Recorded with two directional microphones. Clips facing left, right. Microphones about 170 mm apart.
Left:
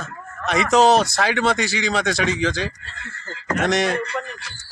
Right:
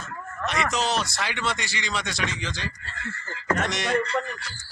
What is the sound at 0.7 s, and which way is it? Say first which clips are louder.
Speech: left 11 dB; 45° left (ahead or behind).